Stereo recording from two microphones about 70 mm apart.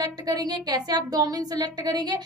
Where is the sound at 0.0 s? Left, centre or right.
Right.